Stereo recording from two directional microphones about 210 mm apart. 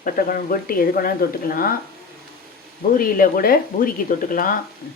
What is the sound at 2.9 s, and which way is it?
Speech, 45° left (ahead or behind).